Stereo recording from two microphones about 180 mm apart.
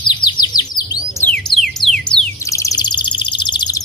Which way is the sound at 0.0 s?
25° left (ahead or behind).